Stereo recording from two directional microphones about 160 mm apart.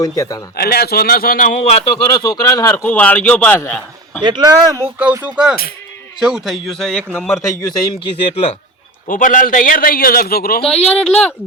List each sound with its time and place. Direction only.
0.0 s a man's voice: 20° left (ahead or behind)
0.5 s a man's voice: 75° left (ahead or behind); by 1.9 s 45° left (ahead or behind)
2.2 s a man's voice: 25° left (ahead or behind)
4.2 s speech: 25° right (ahead or behind)
4.9 s a man's voice: 10° right (ahead or behind); by 7.3 s 10° left (ahead or behind)
7.6 s a man's voice: 25° left (ahead or behind)
9.0 s a man's voice: 55° left (ahead or behind)
10.8 s a man's voice: 5° left (ahead or behind)